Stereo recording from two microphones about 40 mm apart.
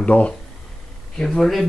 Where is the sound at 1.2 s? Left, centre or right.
Centre.